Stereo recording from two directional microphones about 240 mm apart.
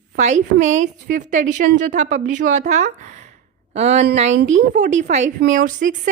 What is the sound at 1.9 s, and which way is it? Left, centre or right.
A woman's voice, right.